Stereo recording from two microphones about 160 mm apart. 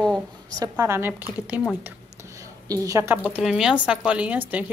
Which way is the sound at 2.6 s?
20° right (ahead or behind).